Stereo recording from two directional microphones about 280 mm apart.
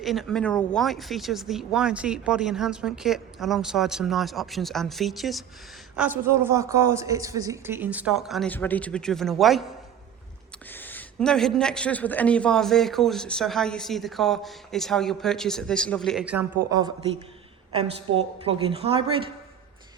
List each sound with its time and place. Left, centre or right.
0.0 s speech: centre
10.7 s a woman's voice: centre